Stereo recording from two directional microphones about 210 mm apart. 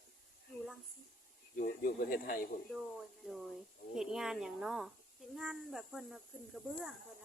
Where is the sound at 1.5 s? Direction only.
45° left (ahead or behind).